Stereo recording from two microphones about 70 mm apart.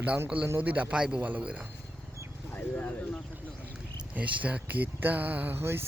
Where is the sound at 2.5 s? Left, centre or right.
Left.